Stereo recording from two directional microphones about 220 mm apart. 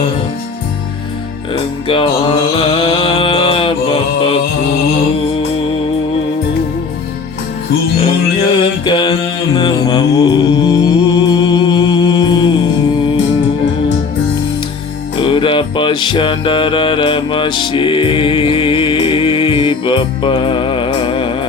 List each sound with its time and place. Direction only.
1.9 s mantra: 25° left (ahead or behind)
8.8 s mantra: 20° left (ahead or behind)
15.2 s music: 25° left (ahead or behind)